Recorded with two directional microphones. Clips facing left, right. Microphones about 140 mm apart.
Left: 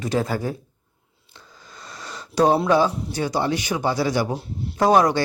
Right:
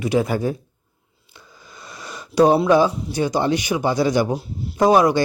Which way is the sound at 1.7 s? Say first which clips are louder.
Right 1 dB; 10° right (ahead or behind).